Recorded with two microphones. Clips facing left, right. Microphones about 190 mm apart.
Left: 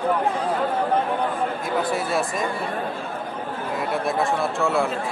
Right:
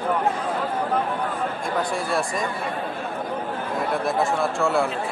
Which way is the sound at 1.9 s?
Centre (ahead or behind).